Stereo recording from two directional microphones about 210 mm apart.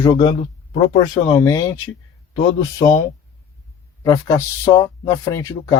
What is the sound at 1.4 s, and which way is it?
Speech, 15° left (ahead or behind).